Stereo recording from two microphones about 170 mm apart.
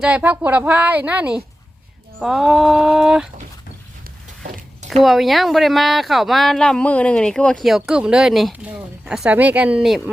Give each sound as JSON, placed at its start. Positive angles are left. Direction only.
{"t": 0.0, "sound": "a woman's voice", "side_deg": -10}
{"t": 5.0, "sound": "speech", "side_deg": 0}